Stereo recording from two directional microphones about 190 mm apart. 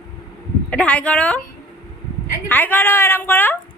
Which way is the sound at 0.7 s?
5° left (ahead or behind).